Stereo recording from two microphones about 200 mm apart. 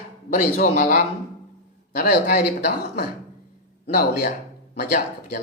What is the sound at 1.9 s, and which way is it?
Speech, 55° left (ahead or behind).